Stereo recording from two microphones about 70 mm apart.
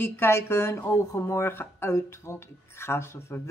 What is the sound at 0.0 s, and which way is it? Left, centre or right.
Speech, left.